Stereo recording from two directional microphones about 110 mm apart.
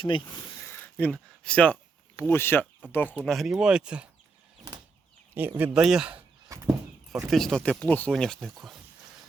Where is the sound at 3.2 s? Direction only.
Centre (ahead or behind).